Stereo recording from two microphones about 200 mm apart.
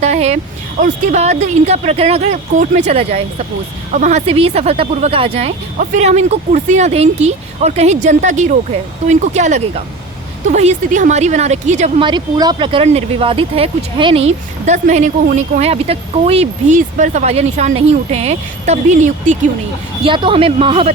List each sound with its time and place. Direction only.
0.0 s a sound: 35° right (ahead or behind)
0.8 s speech: 40° right (ahead or behind)
12.0 s speech: 20° right (ahead or behind); by 19.4 s 40° right (ahead or behind)
20.1 s speech: 25° right (ahead or behind)